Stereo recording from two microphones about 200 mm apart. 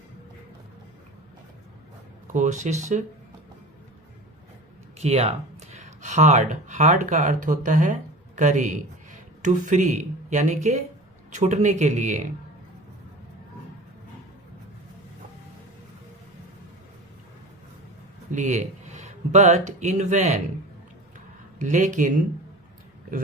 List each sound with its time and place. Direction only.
2.3 s speech: 35° right (ahead or behind)
4.9 s speech: 35° right (ahead or behind)
18.3 s speech: 35° right (ahead or behind)
21.6 s speech: 40° right (ahead or behind)